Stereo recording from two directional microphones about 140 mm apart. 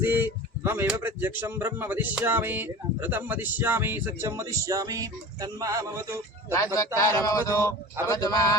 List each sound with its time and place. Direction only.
0.0 s speech: 15° right (ahead or behind)
6.7 s speech: 25° left (ahead or behind)